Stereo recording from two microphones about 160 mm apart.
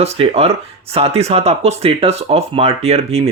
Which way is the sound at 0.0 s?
40° right (ahead or behind).